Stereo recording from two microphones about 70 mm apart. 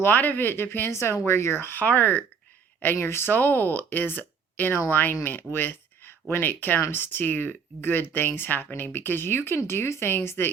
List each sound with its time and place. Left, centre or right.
0.0 s speech: left
2.8 s speech: left